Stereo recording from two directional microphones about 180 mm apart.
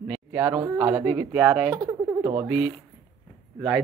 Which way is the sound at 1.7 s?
20° right (ahead or behind).